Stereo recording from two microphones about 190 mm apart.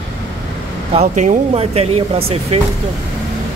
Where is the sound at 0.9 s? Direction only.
35° right (ahead or behind).